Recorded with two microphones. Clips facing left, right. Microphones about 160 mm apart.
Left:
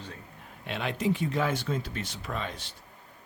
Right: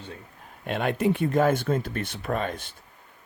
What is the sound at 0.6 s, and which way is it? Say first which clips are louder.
Speech: right 6 dB; 50° right (ahead or behind).